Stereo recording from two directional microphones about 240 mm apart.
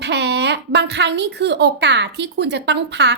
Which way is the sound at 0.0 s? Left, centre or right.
Right.